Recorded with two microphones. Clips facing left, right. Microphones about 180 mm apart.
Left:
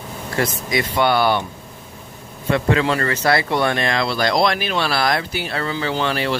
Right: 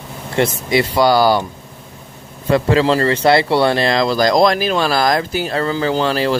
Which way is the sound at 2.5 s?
35° right (ahead or behind).